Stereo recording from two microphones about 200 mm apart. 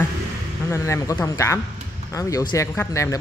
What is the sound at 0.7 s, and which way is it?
Speech, 15° left (ahead or behind).